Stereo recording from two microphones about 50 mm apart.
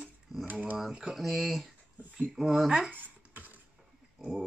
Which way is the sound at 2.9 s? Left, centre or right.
Right.